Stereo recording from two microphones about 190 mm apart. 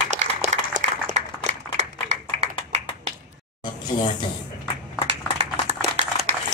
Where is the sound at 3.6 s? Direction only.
25° left (ahead or behind).